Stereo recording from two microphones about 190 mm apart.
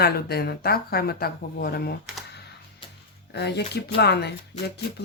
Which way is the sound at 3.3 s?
60° left (ahead or behind).